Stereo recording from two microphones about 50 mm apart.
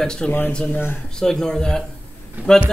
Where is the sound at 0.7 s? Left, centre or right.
Left.